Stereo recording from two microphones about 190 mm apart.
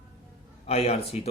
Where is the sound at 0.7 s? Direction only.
35° left (ahead or behind).